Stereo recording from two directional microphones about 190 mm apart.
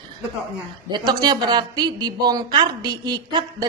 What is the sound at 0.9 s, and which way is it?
A woman's voice, 20° right (ahead or behind).